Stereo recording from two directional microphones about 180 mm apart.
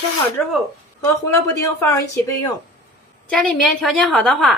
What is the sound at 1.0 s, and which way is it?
A woman's voice, 15° left (ahead or behind).